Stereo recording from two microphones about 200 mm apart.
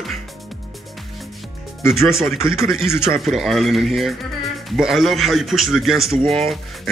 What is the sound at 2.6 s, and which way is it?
A man's voice, centre (ahead or behind).